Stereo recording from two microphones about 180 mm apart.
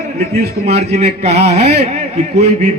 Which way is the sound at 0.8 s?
35° right (ahead or behind).